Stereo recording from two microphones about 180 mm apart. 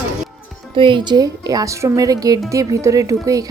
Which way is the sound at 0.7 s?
30° right (ahead or behind).